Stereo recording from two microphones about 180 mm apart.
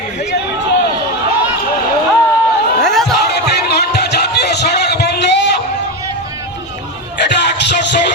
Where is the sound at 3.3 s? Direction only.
65° left (ahead or behind).